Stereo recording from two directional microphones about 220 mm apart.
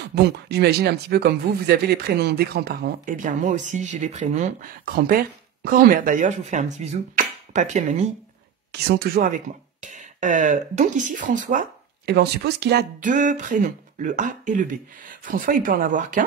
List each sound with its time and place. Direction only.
0.1 s speech: 45° right (ahead or behind)
8.7 s speech: 45° right (ahead or behind)
12.1 s speech: 50° right (ahead or behind)